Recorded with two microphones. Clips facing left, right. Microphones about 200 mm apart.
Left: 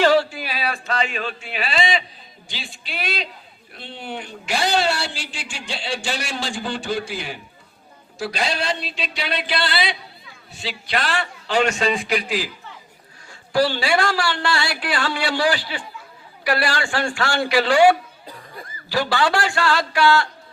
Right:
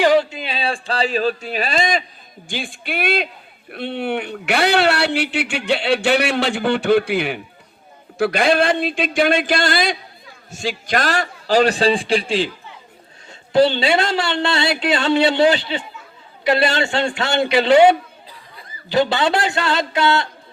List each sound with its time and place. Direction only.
0.0 s a man's voice: 20° right (ahead or behind)
13.5 s speech: 20° right (ahead or behind)